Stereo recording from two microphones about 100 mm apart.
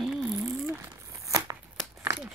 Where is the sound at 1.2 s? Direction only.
35° right (ahead or behind).